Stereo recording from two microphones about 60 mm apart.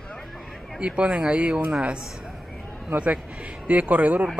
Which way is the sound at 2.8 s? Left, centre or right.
Right.